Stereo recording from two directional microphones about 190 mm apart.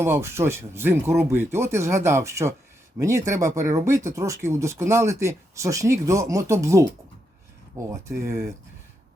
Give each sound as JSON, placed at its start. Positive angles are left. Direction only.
{"t": 0.0, "sound": "speech", "side_deg": -15}